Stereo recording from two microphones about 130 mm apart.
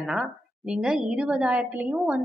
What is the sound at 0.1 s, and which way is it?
A woman's voice, 5° right (ahead or behind).